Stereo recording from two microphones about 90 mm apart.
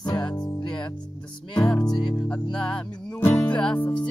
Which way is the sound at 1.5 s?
55° left (ahead or behind).